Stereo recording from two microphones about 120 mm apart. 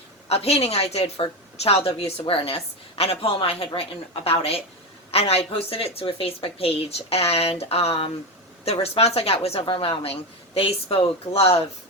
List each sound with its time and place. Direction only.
0.3 s a woman's voice: 60° left (ahead or behind)
9.6 s speech: 45° left (ahead or behind)